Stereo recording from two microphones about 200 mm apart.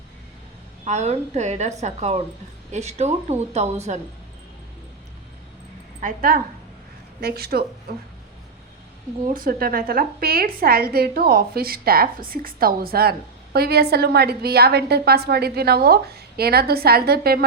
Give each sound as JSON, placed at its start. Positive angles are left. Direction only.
{"t": 0.9, "sound": "a woman's voice", "side_deg": -35}
{"t": 6.0, "sound": "a woman's voice", "side_deg": -45}
{"t": 9.2, "sound": "a woman's voice", "side_deg": -45}